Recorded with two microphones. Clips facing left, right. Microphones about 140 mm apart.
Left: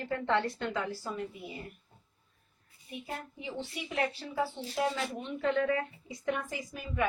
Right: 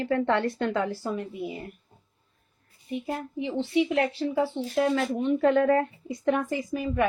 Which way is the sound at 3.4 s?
65° right (ahead or behind).